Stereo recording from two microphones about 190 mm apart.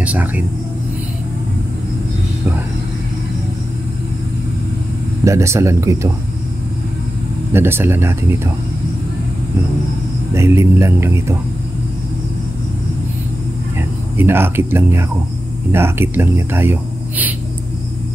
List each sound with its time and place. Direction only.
0.0 s speech: 10° right (ahead or behind)
5.2 s speech: 15° right (ahead or behind)
7.5 s speech: 10° right (ahead or behind)
10.3 s speech: 15° right (ahead or behind)
13.7 s speech: 10° right (ahead or behind)